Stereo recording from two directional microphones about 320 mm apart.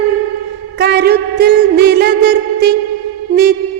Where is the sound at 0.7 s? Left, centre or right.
Right.